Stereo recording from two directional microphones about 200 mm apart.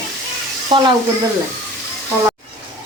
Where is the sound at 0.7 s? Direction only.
25° right (ahead or behind).